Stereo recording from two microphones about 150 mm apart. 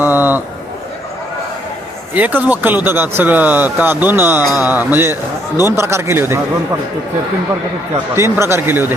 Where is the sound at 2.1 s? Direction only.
10° right (ahead or behind).